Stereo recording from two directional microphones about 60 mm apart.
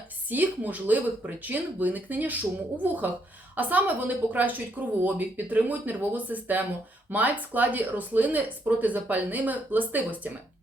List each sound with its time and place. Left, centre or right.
0.3 s speech: right